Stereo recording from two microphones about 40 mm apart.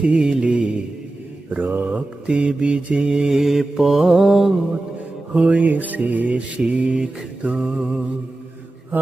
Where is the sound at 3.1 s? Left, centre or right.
Centre.